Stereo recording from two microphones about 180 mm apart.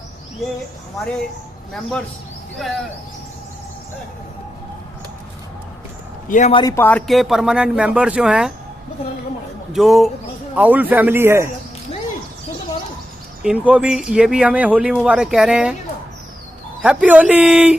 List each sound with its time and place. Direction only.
1.7 s speech: 5° left (ahead or behind)
6.2 s a man's voice: 45° left (ahead or behind)
6.5 s speech: 20° left (ahead or behind); by 8.5 s 5° right (ahead or behind)
9.7 s a man's voice: centre (ahead or behind)
13.4 s speech: 5° right (ahead or behind)
16.8 s a man's voice: 5° right (ahead or behind)